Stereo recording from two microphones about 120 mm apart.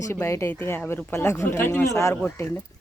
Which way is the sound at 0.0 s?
20° left (ahead or behind).